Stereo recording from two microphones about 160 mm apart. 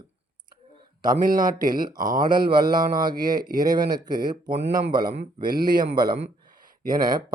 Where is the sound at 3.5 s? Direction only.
25° right (ahead or behind).